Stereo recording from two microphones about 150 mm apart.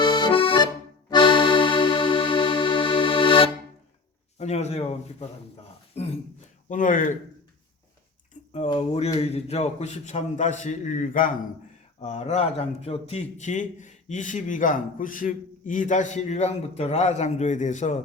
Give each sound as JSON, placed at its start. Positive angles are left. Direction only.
{"t": 0.0, "sound": "accordion", "side_deg": 30}
{"t": 1.1, "sound": "music", "side_deg": 35}
{"t": 4.4, "sound": "a man's voice", "side_deg": 45}
{"t": 6.0, "sound": "a man's voice", "side_deg": 45}
{"t": 6.7, "sound": "speech", "side_deg": 60}
{"t": 9.1, "sound": "a man's voice", "side_deg": 45}
{"t": 12.0, "sound": "a man's voice", "side_deg": 45}